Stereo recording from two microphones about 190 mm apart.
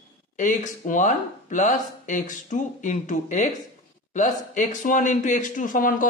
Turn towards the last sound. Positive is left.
turn(degrees=45)  # may be behind; listen again after turning